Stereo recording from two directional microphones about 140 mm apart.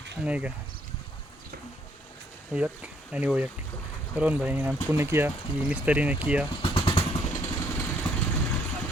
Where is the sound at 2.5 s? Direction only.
10° right (ahead or behind).